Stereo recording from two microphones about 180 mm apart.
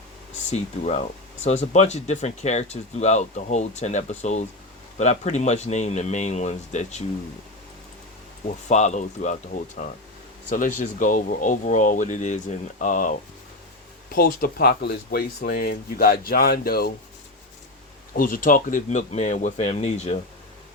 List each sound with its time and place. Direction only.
0.5 s speech: 35° left (ahead or behind)
8.4 s speech: 40° left (ahead or behind)
14.2 s speech: 55° left (ahead or behind)
18.2 s speech: 50° left (ahead or behind)